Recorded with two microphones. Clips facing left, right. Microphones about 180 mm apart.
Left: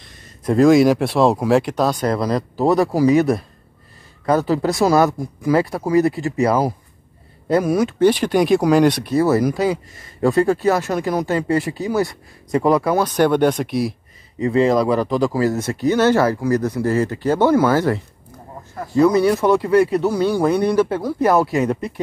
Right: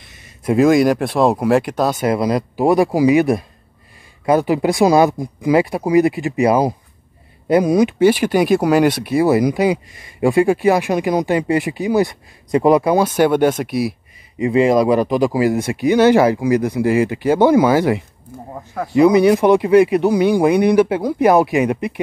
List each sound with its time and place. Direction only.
0.0 s speech: 5° right (ahead or behind)
14.4 s speech: 15° right (ahead or behind)